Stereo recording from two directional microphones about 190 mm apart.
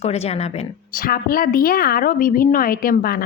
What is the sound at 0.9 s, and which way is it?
A woman's voice, 50° left (ahead or behind).